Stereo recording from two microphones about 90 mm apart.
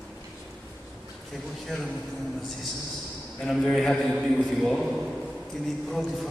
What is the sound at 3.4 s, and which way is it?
A man's voice, 5° left (ahead or behind).